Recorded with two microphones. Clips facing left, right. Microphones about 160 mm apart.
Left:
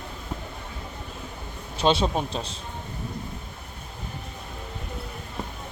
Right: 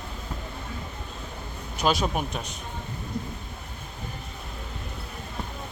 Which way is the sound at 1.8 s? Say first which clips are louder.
Left 3 dB; 30° left (ahead or behind).